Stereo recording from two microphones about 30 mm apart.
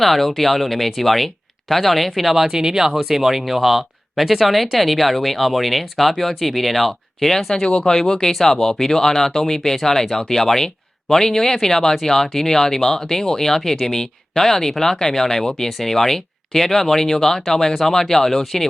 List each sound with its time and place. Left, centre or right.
0.0 s speech: centre
2.5 s speech: centre
7.6 s speech: left
8.3 s speech: centre